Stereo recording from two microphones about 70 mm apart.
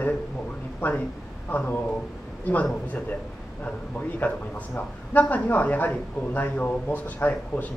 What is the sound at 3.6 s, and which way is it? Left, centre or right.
A man's voice, left.